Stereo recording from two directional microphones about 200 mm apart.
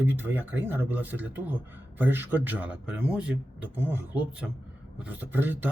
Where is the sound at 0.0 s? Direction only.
10° right (ahead or behind).